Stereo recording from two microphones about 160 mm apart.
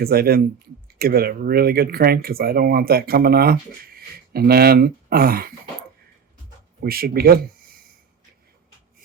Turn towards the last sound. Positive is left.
turn(degrees=-70)  # may be behind; listen again after turning